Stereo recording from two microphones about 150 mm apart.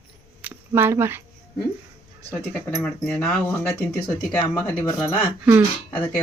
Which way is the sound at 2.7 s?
5° left (ahead or behind).